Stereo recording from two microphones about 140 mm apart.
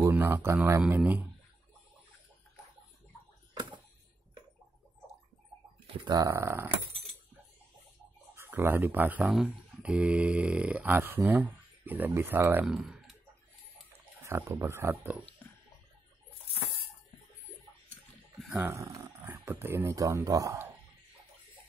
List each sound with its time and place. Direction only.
0.0 s speech: 15° right (ahead or behind)
6.0 s speech: 30° right (ahead or behind)
6.3 s speech: 15° right (ahead or behind)
8.4 s speech: 15° right (ahead or behind)
12.6 s speech: centre (ahead or behind)
14.2 s speech: 20° right (ahead or behind)
18.5 s speech: 15° right (ahead or behind)